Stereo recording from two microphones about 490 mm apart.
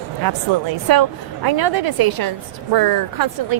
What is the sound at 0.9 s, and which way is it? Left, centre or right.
Speech, right.